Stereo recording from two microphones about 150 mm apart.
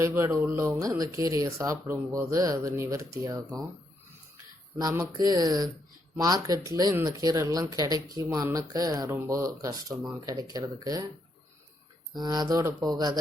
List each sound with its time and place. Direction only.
0.0 s speech: 20° right (ahead or behind)
4.8 s speech: 25° right (ahead or behind)
12.1 s speech: 30° right (ahead or behind)